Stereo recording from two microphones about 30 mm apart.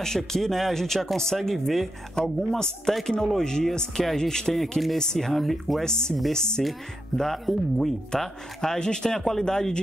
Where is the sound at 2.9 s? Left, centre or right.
Centre.